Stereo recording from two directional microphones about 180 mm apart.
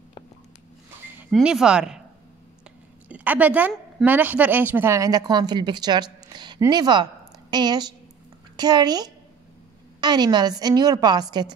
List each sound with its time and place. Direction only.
1.3 s speech: 5° right (ahead or behind)
3.1 s a woman's voice: 10° right (ahead or behind)